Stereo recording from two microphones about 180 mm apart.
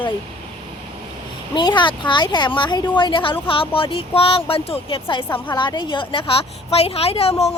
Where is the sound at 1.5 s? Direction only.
25° left (ahead or behind).